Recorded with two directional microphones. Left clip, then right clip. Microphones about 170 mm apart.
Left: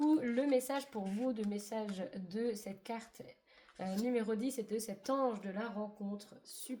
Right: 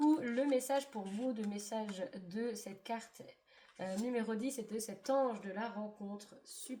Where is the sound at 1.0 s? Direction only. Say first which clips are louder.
Left 3 dB; 20° left (ahead or behind).